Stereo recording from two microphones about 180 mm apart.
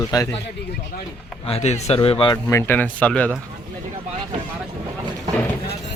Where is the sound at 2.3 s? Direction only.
15° left (ahead or behind).